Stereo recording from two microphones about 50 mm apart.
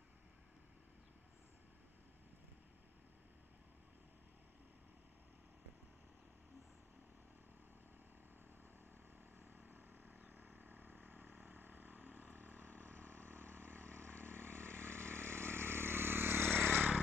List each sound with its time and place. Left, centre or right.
9.4 s vehicle: right
16.6 s vehicle: right